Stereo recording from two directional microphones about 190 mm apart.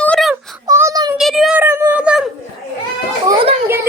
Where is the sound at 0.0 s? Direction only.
5° left (ahead or behind).